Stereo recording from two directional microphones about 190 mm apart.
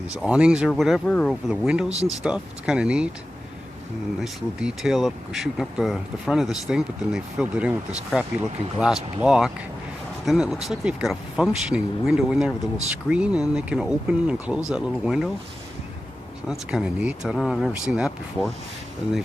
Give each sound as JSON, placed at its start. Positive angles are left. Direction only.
{"t": 0.2, "sound": "speech", "side_deg": -5}
{"t": 1.9, "sound": "speech", "side_deg": -35}
{"t": 2.2, "sound": "speech", "side_deg": -5}
{"t": 4.2, "sound": "speech", "side_deg": 0}
{"t": 16.5, "sound": "speech", "side_deg": -5}